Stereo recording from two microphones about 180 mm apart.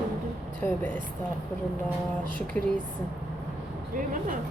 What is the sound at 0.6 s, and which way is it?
Speech, 10° left (ahead or behind).